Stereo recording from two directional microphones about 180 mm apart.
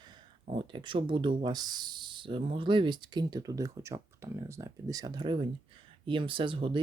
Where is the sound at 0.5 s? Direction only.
25° right (ahead or behind).